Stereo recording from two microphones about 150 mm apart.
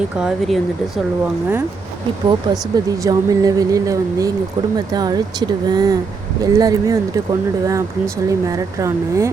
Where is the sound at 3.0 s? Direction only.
25° right (ahead or behind).